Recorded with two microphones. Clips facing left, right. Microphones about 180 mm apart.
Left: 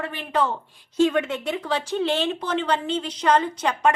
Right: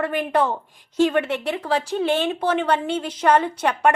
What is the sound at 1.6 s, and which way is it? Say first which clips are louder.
Speech: right 2 dB; 35° right (ahead or behind).